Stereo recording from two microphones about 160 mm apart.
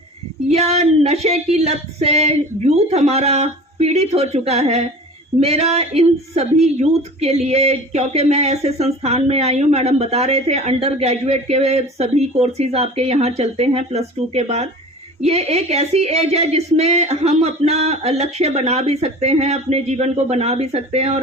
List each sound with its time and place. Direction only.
0.4 s a woman's voice: 40° right (ahead or behind)